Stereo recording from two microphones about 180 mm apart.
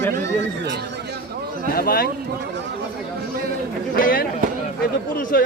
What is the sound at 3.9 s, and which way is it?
Speech, 50° left (ahead or behind).